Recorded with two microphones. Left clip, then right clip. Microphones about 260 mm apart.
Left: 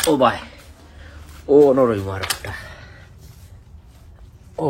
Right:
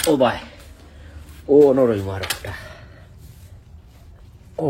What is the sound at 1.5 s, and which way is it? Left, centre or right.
Speech, left.